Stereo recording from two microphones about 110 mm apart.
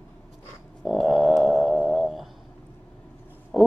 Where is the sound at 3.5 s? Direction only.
5° left (ahead or behind).